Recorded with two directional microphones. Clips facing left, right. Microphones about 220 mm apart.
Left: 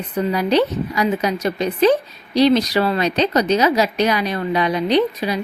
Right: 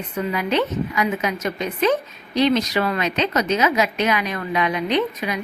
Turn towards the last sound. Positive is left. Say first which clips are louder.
# left 4 dB
turn(degrees=35)  # may be behind; listen again after turning